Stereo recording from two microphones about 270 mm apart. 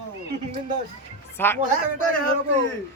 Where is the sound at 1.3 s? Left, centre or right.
Centre.